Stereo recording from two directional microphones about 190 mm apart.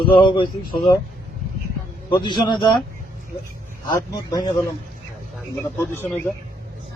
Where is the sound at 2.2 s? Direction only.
25° left (ahead or behind).